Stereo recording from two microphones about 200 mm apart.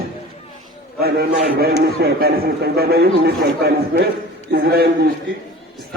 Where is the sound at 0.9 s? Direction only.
50° right (ahead or behind).